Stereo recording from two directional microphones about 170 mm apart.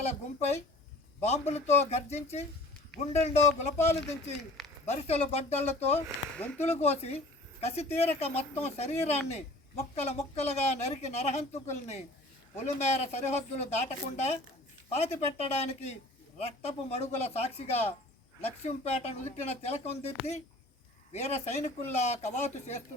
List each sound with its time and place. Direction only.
0.0 s speech: 40° left (ahead or behind)
4.0 s speech: 5° left (ahead or behind)
4.9 s speech: 35° left (ahead or behind)
6.3 s speech: 5° left (ahead or behind)
6.6 s speech: 40° left (ahead or behind)
21.1 s speech: 40° left (ahead or behind)